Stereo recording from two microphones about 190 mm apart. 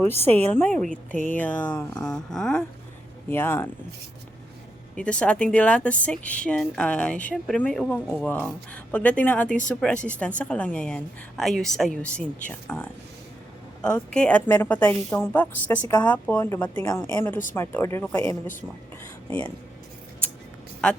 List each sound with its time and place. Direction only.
0.0 s speech: 10° left (ahead or behind)
2.0 s a woman's voice: 5° left (ahead or behind)
4.9 s a woman's voice: 5° left (ahead or behind)